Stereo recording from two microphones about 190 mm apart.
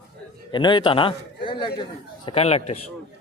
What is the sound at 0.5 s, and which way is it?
A man's voice, 25° left (ahead or behind).